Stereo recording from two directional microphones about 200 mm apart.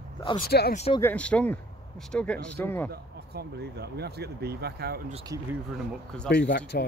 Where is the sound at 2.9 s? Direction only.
50° right (ahead or behind).